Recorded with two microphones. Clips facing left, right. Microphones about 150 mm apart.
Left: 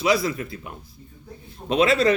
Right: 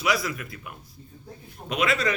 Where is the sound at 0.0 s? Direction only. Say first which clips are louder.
Left 5 dB; 25° left (ahead or behind).